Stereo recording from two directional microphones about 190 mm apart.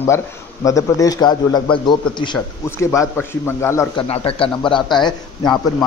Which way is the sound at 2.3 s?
15° left (ahead or behind).